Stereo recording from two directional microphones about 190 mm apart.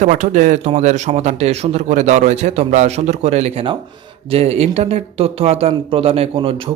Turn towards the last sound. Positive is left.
turn(degrees=-30)  # may be behind; listen again after turning